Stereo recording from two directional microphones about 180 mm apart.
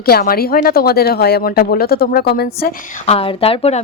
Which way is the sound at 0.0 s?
55° left (ahead or behind).